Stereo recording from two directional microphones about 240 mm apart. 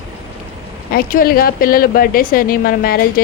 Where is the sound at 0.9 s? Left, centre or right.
Left.